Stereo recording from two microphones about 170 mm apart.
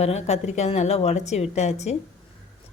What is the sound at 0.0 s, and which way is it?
Speech, 40° left (ahead or behind).